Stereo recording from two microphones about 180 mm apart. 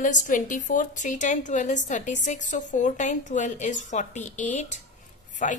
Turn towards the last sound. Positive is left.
turn(degrees=45)  # may be behind; listen again after turning